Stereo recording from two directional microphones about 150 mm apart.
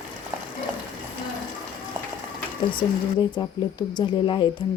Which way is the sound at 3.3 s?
30° left (ahead or behind).